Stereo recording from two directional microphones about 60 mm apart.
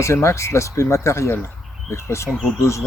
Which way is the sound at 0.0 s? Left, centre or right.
Left.